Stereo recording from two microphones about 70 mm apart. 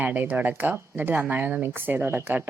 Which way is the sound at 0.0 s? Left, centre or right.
Right.